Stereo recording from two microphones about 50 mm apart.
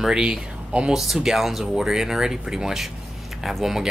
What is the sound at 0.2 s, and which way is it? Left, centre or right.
Speech, right.